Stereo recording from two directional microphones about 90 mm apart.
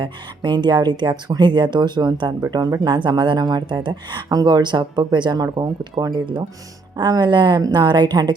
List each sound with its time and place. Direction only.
0.0 s speech: 55° right (ahead or behind)
2.5 s speech: 45° right (ahead or behind)